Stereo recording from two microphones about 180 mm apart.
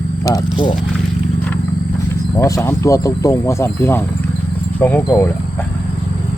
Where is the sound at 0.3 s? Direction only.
25° left (ahead or behind).